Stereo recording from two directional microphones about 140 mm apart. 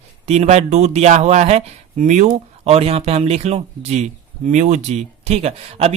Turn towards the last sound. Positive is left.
turn(degrees=-50)  # may be behind; listen again after turning